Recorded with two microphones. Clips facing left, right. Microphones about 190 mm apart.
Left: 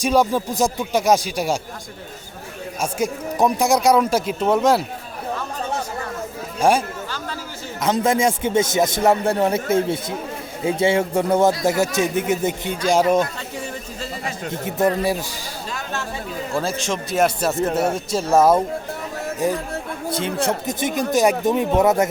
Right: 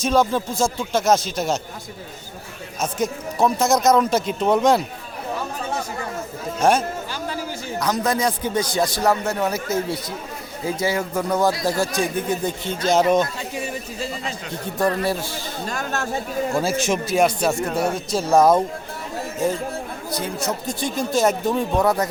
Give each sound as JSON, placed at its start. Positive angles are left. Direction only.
{"t": 0.0, "sound": "speech", "side_deg": 10}
{"t": 2.8, "sound": "speech", "side_deg": 15}
{"t": 6.6, "sound": "speech", "side_deg": 10}
{"t": 7.8, "sound": "speech", "side_deg": 25}
{"t": 14.5, "sound": "speech", "side_deg": 20}
{"t": 15.7, "sound": "a sound", "side_deg": -45}
{"t": 16.6, "sound": "a man's voice", "side_deg": -10}
{"t": 17.2, "sound": "speech", "side_deg": 0}
{"t": 17.8, "sound": "speech", "side_deg": 25}
{"t": 18.3, "sound": "speech", "side_deg": 5}
{"t": 19.4, "sound": "speech", "side_deg": 15}
{"t": 20.1, "sound": "speech", "side_deg": 25}